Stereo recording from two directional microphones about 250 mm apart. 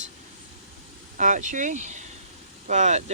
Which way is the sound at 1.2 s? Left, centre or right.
Right.